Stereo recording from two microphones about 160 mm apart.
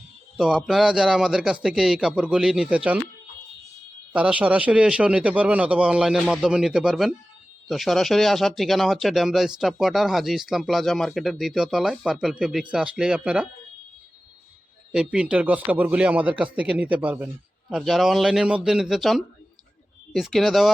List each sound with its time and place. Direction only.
0.3 s speech: 5° right (ahead or behind)
4.1 s a man's voice: 10° right (ahead or behind)
14.9 s a man's voice: 5° right (ahead or behind)